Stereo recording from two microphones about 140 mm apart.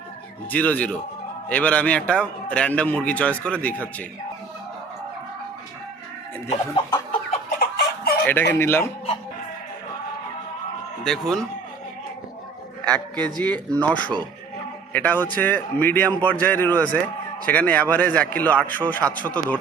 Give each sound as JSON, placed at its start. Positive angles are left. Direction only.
{"t": 0.5, "sound": "a man's voice", "side_deg": 10}
{"t": 7.3, "sound": "a sound", "side_deg": 90}
{"t": 8.3, "sound": "a man's voice", "side_deg": 15}
{"t": 11.0, "sound": "a man's voice", "side_deg": 5}
{"t": 12.8, "sound": "a man's voice", "side_deg": 10}